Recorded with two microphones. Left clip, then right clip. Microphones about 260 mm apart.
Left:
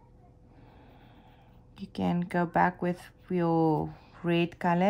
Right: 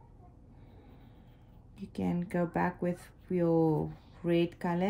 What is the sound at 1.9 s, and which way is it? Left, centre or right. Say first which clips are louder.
Speech: left 4 dB; centre.